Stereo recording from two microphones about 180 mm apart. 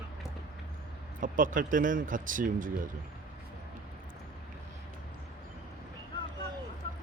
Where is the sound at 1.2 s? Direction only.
50° right (ahead or behind).